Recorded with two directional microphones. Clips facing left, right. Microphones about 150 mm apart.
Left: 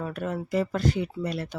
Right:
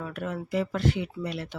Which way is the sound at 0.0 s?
40° left (ahead or behind).